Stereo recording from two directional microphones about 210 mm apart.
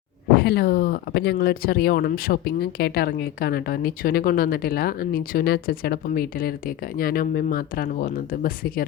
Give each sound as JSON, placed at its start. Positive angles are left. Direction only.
{"t": 0.3, "sound": "speech", "side_deg": 50}